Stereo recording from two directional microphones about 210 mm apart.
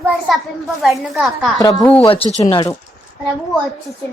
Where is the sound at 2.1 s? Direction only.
30° left (ahead or behind).